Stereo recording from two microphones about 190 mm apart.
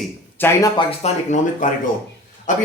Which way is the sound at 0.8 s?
30° left (ahead or behind).